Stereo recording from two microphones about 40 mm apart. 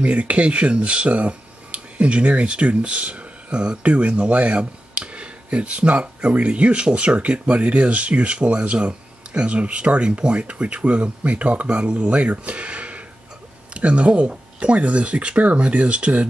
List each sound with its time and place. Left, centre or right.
0.0 s speech: right